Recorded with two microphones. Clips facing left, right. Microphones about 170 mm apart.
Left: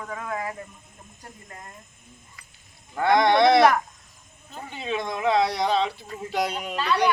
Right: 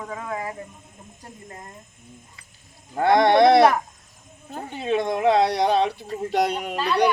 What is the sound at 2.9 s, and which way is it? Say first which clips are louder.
Speech: right 2 dB; 35° right (ahead or behind).